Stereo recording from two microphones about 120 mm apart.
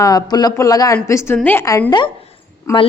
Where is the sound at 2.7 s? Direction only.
20° left (ahead or behind).